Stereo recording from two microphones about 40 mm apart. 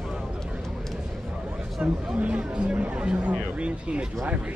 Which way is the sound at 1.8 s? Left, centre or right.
Right.